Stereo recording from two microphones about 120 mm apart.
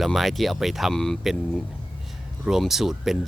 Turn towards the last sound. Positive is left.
turn(degrees=0)  # may be behind; listen again after turning